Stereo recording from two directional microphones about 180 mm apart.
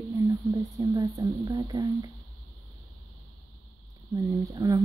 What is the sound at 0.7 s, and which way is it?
Speech, 15° right (ahead or behind).